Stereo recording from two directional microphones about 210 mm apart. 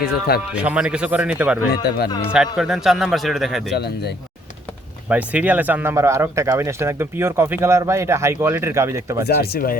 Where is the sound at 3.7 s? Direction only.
50° left (ahead or behind).